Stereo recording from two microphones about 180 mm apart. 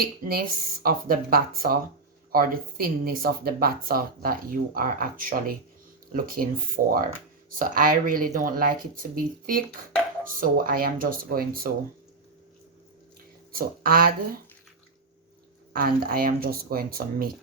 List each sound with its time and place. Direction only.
0.0 s speech: 55° right (ahead or behind)
13.6 s speech: 55° right (ahead or behind)
15.7 s speech: 55° right (ahead or behind)